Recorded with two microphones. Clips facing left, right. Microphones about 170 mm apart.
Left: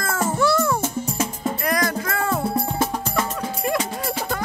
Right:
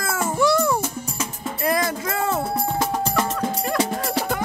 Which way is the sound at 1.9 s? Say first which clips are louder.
Even; 20° right (ahead or behind).